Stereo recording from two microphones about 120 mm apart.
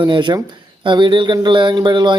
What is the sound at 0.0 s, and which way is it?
Speech, 40° right (ahead or behind).